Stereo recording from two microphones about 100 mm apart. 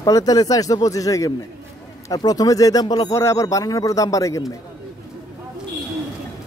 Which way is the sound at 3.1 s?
30° left (ahead or behind).